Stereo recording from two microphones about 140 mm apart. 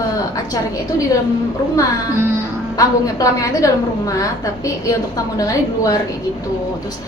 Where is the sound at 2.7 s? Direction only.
25° left (ahead or behind).